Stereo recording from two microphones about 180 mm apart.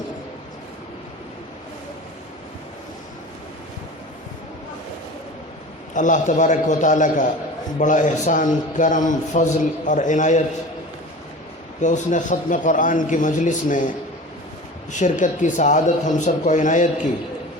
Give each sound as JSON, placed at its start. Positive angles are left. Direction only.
{"t": 5.9, "sound": "a man's voice", "side_deg": 45}
{"t": 11.8, "sound": "a man's voice", "side_deg": 45}
{"t": 14.9, "sound": "a man's voice", "side_deg": 45}